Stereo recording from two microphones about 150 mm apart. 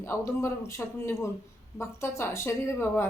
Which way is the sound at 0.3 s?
20° left (ahead or behind).